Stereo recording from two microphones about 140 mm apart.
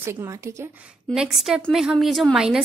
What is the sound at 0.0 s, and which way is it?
Speech, 20° right (ahead or behind).